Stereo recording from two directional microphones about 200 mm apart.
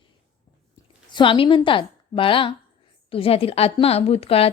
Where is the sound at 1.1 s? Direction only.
25° left (ahead or behind).